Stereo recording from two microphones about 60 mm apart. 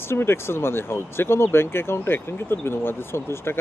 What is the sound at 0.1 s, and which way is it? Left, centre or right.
Speech, left.